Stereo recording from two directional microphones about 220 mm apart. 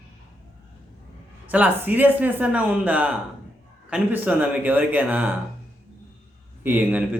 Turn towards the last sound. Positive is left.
turn(degrees=-5)  # may be behind; listen again after turning